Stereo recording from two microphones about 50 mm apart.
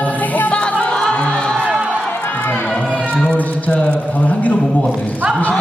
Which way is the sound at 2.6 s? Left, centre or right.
Left.